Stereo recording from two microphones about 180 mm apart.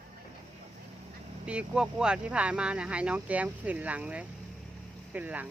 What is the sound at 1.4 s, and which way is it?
Speech, 5° right (ahead or behind).